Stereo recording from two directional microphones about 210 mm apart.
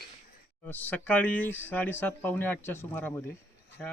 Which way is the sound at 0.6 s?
10° left (ahead or behind).